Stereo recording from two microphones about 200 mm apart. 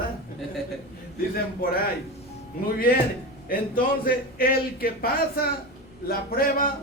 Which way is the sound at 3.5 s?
45° left (ahead or behind).